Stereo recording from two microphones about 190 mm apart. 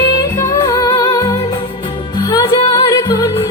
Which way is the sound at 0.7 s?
20° left (ahead or behind).